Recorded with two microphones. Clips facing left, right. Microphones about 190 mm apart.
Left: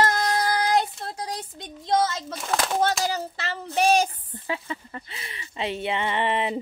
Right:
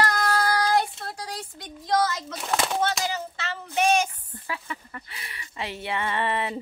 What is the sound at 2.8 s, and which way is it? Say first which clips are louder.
Child singing: left 3 dB; 40° left (ahead or behind).